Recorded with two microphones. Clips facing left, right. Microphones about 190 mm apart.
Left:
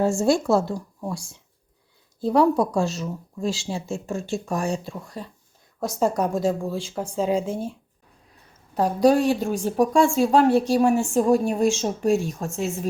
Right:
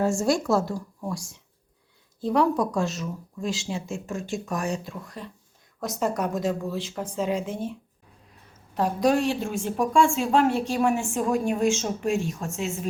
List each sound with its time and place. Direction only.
0.0 s speech: 30° left (ahead or behind)
8.7 s speech: 35° left (ahead or behind)